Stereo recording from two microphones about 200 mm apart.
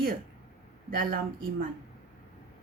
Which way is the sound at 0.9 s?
45° right (ahead or behind).